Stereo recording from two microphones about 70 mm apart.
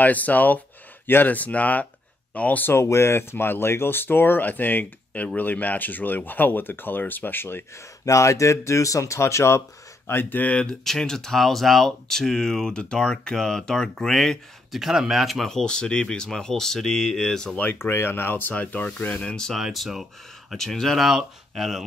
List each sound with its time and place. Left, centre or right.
0.0 s speech: left
2.7 s speech: left
8.0 s speech: left
10.0 s speech: left; by 17.6 s centre
17.6 s speech: left
19.1 s speech: centre
19.6 s speech: centre